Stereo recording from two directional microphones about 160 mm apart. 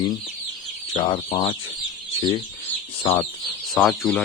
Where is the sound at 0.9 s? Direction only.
30° left (ahead or behind).